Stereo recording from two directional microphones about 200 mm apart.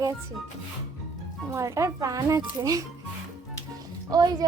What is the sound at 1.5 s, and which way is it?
Speech, 15° right (ahead or behind).